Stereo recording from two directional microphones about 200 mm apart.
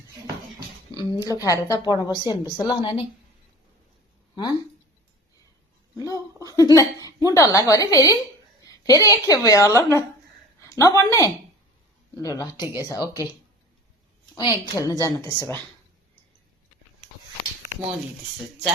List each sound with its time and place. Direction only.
0.9 s a woman's voice: 20° left (ahead or behind)
6.1 s a woman's voice: 15° left (ahead or behind)
12.6 s speech: 15° right (ahead or behind)
12.9 s a woman's voice: 15° left (ahead or behind)
14.3 s a woman's voice: 20° left (ahead or behind)